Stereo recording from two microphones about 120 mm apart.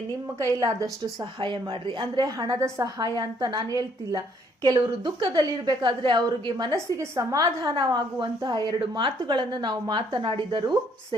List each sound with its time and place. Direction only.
0.3 s a woman's voice: 25° right (ahead or behind)
1.2 s a woman's voice: 45° right (ahead or behind)
2.6 s a woman's voice: 25° right (ahead or behind)
3.0 s a woman's voice: 40° right (ahead or behind)
6.7 s a woman's voice: 25° right (ahead or behind)
8.8 s a woman's voice: 45° right (ahead or behind)